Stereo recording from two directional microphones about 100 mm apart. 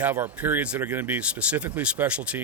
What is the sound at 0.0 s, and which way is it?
Speech, 20° right (ahead or behind).